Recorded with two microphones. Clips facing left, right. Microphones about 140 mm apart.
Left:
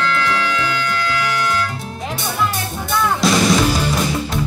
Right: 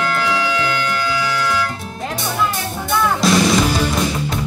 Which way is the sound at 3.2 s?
Centre (ahead or behind).